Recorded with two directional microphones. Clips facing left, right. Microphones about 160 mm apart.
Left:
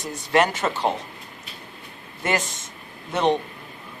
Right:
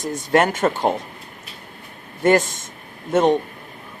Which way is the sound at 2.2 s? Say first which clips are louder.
Right 9 dB; 50° right (ahead or behind).